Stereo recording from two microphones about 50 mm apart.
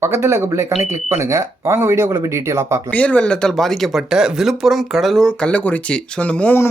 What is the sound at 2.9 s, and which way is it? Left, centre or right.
A man's voice, left.